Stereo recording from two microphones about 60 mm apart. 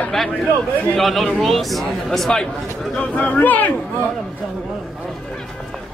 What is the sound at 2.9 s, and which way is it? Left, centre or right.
Speech, left.